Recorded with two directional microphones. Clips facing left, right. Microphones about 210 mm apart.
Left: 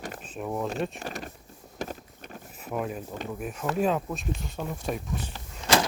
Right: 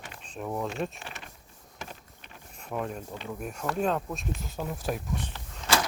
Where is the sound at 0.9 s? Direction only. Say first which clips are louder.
Left 8 dB; 40° left (ahead or behind).